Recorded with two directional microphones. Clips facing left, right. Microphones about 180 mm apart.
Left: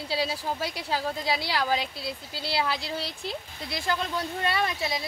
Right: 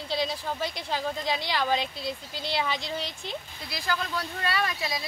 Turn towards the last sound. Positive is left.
turn(degrees=25)  # may be behind; listen again after turning